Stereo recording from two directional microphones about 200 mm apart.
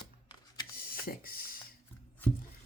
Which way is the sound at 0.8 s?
45° left (ahead or behind).